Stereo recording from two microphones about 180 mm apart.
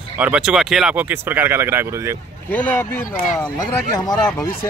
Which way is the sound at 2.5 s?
10° left (ahead or behind).